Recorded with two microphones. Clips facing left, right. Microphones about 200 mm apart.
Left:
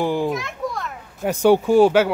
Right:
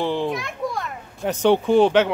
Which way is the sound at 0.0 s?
10° left (ahead or behind).